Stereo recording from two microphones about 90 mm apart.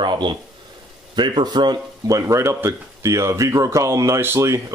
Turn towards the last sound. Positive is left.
turn(degrees=-35)  # may be behind; listen again after turning